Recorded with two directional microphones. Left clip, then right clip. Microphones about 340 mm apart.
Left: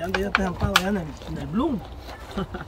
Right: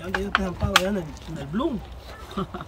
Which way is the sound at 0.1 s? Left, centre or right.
Left.